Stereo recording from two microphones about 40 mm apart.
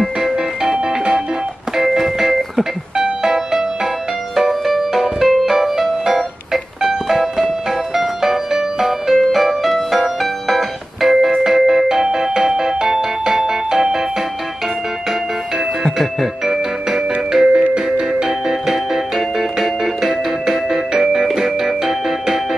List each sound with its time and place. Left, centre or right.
0.2 s music: centre
16.4 s music: centre
17.5 s music: right
18.7 s music: centre